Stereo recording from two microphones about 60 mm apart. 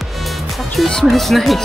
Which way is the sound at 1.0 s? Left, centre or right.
Centre.